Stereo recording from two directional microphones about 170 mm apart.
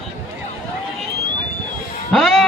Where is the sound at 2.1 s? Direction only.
Centre (ahead or behind).